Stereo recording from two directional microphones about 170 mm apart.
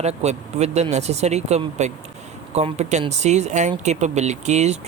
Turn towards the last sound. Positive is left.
turn(degrees=-40)  # may be behind; listen again after turning